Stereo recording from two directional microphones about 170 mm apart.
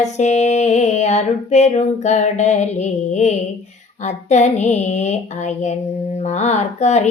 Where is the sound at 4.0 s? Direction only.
40° left (ahead or behind).